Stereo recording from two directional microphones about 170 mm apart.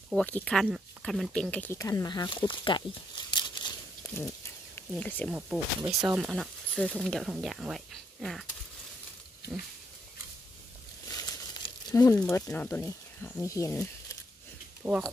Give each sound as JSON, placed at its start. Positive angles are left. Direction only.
{"t": 0.1, "sound": "speech", "side_deg": 5}
{"t": 3.3, "sound": "crumpling", "side_deg": 25}
{"t": 4.1, "sound": "speech", "side_deg": 15}
{"t": 5.9, "sound": "speech", "side_deg": -5}
{"t": 11.1, "sound": "a sound", "side_deg": 20}
{"t": 12.4, "sound": "speech", "side_deg": 10}
{"t": 14.8, "sound": "speech", "side_deg": -5}